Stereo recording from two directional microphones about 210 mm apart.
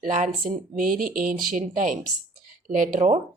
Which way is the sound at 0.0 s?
40° right (ahead or behind).